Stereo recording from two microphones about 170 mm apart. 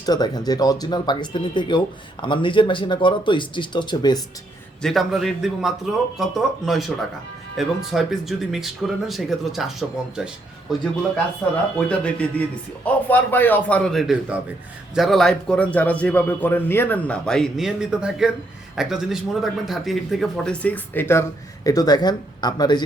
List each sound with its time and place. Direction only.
0.0 s speech: 25° left (ahead or behind)
4.8 s speech: centre (ahead or behind)
11.9 s speech: 5° left (ahead or behind); by 22.8 s 25° left (ahead or behind)